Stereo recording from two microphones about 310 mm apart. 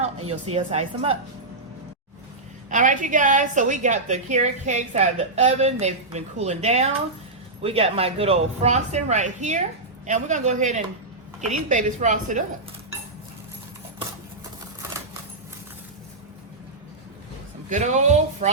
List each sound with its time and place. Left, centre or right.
0.0 s a woman's voice: centre
2.6 s a woman's voice: right
17.7 s a woman's voice: right